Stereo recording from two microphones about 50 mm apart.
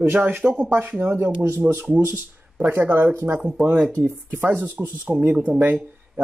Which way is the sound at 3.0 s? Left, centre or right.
Right.